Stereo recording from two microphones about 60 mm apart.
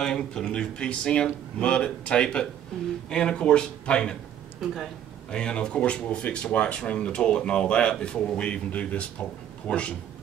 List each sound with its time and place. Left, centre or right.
0.0 s speech: centre
5.3 s a man's voice: centre